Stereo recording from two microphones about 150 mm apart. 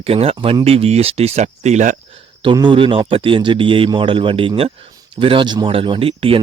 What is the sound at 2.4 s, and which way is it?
Speech, 30° right (ahead or behind).